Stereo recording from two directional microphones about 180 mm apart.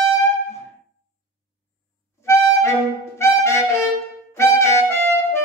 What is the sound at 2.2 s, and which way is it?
Harmonica, 15° left (ahead or behind).